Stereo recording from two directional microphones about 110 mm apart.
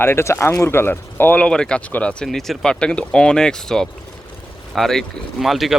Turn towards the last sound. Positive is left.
turn(degrees=0)  # may be behind; listen again after turning